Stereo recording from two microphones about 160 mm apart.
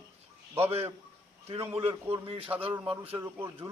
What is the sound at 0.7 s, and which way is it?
Speech, 40° right (ahead or behind).